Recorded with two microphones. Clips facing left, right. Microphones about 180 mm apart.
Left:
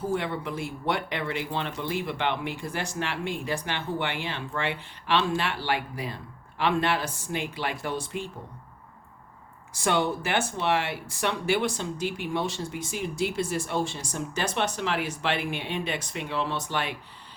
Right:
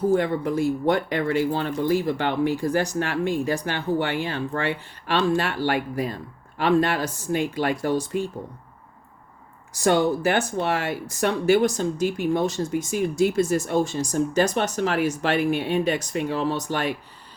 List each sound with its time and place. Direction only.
0.1 s speech: 45° right (ahead or behind)
9.7 s speech: 40° right (ahead or behind)